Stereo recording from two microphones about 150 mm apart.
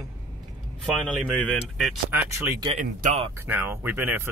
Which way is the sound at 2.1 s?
15° right (ahead or behind).